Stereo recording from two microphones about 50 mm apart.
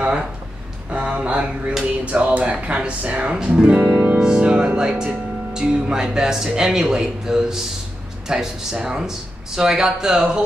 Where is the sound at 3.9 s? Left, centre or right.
Right.